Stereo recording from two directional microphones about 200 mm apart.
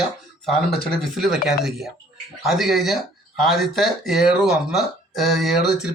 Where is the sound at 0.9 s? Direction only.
Centre (ahead or behind).